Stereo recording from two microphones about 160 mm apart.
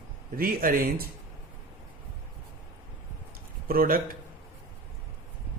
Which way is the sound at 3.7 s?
65° right (ahead or behind).